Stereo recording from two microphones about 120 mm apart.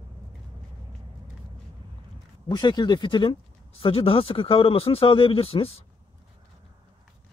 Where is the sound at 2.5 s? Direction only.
35° left (ahead or behind); by 5.8 s 55° left (ahead or behind).